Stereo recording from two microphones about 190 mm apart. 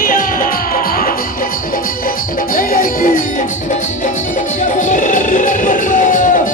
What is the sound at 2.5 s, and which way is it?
Speech, 45° left (ahead or behind).